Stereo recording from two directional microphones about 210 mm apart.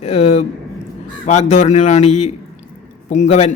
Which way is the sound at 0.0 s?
30° left (ahead or behind).